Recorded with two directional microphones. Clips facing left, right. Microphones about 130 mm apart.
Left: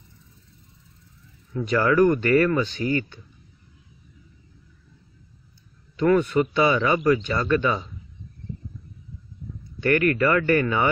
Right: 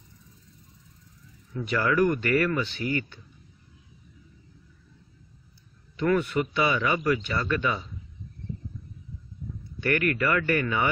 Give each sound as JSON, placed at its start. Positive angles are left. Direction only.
{"t": 1.7, "sound": "speech", "side_deg": 40}
{"t": 5.9, "sound": "speech", "side_deg": 40}
{"t": 9.8, "sound": "speech", "side_deg": 35}